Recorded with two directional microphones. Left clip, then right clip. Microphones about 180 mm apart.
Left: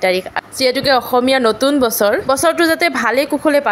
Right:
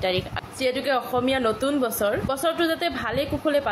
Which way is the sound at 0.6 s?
60° left (ahead or behind).